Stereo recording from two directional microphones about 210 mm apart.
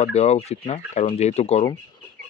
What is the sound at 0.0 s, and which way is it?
Speech, 30° left (ahead or behind).